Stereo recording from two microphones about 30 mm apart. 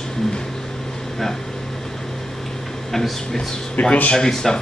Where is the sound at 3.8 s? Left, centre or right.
Left.